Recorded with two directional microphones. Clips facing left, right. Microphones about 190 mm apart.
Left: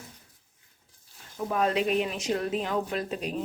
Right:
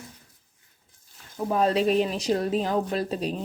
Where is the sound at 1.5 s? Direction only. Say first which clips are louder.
Right 4 dB; 35° right (ahead or behind).